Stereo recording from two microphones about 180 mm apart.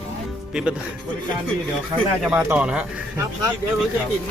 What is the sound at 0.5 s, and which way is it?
Speech, centre (ahead or behind).